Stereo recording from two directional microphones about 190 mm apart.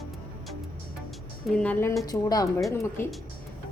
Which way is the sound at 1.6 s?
5° left (ahead or behind).